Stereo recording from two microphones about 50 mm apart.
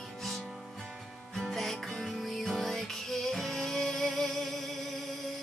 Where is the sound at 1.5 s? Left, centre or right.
Centre.